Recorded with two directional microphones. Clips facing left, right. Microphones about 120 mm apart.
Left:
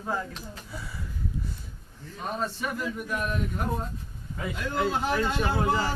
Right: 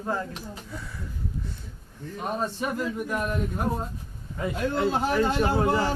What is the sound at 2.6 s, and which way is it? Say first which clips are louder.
Speech: right 3 dB; 35° right (ahead or behind).